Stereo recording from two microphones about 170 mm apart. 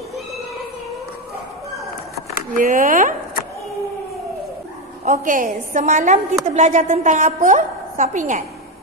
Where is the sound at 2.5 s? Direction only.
50° right (ahead or behind).